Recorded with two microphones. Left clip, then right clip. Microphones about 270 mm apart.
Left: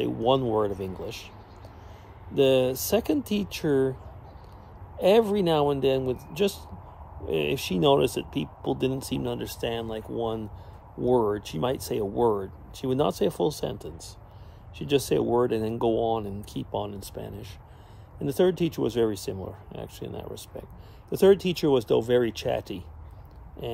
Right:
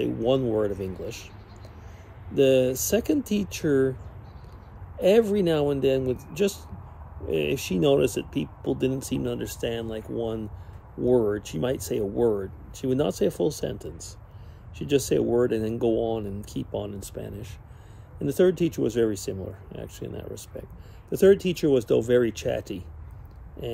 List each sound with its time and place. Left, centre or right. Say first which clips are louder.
0.0 s speech: even; centre
2.3 s speech: right 1 dB; centre
4.9 s speech: right 1 dB; centre